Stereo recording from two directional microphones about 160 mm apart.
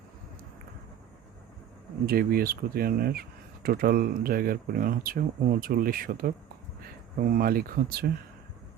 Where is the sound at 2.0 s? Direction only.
70° right (ahead or behind).